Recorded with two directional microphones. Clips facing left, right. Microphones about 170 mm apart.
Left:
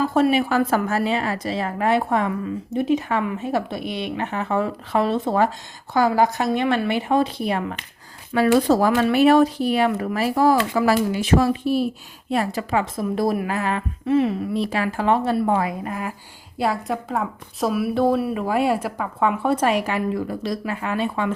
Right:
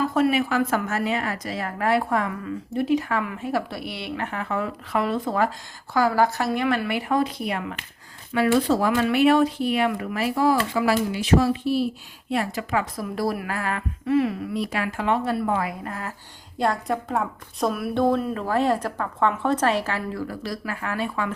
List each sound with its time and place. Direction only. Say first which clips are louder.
0.1 s a woman's voice: left 3 dB; 30° left (ahead or behind); by 11.9 s 50° left (ahead or behind)
12.3 s a woman's voice: left 3 dB; 35° left (ahead or behind)
15.8 s a woman's voice: left 4 dB; 15° left (ahead or behind)
16.6 s a woman's voice: left 1 dB; 5° left (ahead or behind); by 21.3 s 25° left (ahead or behind)